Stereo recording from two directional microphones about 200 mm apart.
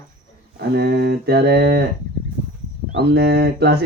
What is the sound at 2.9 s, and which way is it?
Speech, 55° right (ahead or behind).